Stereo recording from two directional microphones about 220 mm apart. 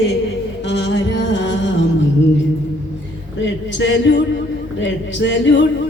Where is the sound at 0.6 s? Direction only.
55° left (ahead or behind).